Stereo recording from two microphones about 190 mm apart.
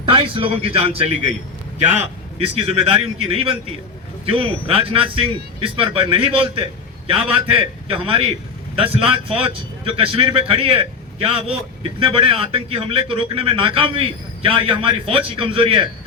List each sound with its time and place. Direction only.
0.0 s speech: 25° right (ahead or behind)
2.7 s a man's voice: 30° right (ahead or behind)